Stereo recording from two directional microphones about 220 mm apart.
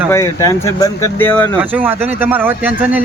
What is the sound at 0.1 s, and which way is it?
Speech, 15° left (ahead or behind).